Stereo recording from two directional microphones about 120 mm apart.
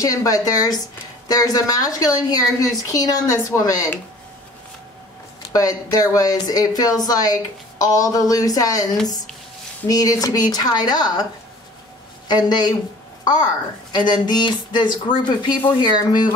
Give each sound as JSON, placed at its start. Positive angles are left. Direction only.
{"t": 0.0, "sound": "a woman's voice", "side_deg": 30}
{"t": 5.5, "sound": "speech", "side_deg": 30}
{"t": 9.8, "sound": "speech", "side_deg": 30}
{"t": 12.3, "sound": "a woman's voice", "side_deg": 35}